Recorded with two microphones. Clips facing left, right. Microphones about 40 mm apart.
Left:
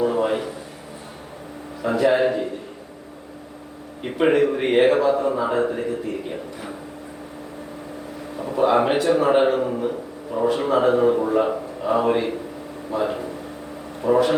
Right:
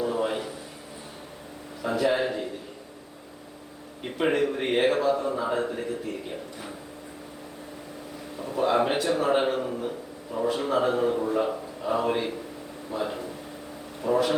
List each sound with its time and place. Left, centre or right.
0.0 s a sound: centre
1.8 s a man's voice: centre
4.0 s a man's voice: centre
5.8 s a man's voice: centre
8.4 s a man's voice: left